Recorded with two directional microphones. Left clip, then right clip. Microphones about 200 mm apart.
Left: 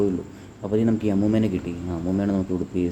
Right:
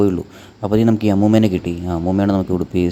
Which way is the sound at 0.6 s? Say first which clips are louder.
Right 7 dB; 50° right (ahead or behind).